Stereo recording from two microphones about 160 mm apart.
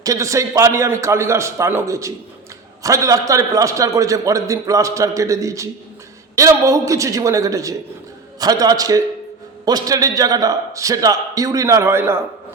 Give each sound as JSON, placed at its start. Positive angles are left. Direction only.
{"t": 0.0, "sound": "a man's voice", "side_deg": -20}